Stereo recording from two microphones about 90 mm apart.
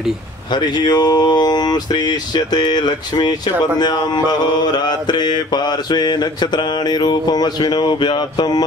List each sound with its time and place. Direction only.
0.5 s mantra: 55° left (ahead or behind)